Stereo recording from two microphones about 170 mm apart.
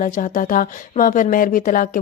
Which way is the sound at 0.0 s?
50° left (ahead or behind).